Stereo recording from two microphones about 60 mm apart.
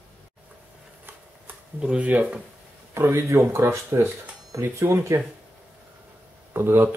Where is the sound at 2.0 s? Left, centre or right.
Right.